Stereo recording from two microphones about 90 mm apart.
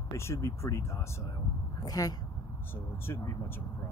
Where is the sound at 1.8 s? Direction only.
45° left (ahead or behind).